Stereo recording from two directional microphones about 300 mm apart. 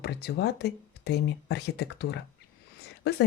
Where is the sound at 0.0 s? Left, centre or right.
Left.